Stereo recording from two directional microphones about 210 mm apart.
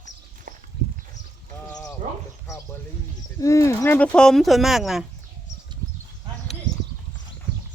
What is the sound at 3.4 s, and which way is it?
Speech, 15° left (ahead or behind).